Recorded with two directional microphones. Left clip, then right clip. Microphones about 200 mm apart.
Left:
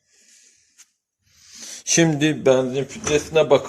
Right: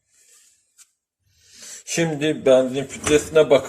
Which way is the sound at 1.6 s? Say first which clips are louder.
Left 5 dB; 50° left (ahead or behind).